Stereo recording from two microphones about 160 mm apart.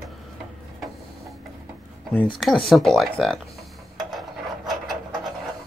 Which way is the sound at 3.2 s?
Centre (ahead or behind).